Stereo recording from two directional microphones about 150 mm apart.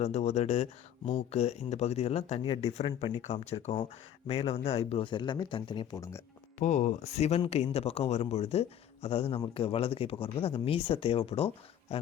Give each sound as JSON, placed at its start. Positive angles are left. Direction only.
{"t": 0.0, "sound": "speech", "side_deg": 50}
{"t": 2.7, "sound": "speech", "side_deg": 45}
{"t": 6.0, "sound": "speech", "side_deg": 20}
{"t": 6.6, "sound": "speech", "side_deg": 50}